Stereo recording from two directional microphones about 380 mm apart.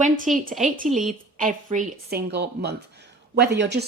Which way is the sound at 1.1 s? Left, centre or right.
Right.